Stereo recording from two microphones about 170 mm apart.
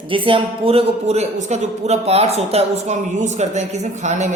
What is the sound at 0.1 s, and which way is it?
A man's voice, 30° right (ahead or behind).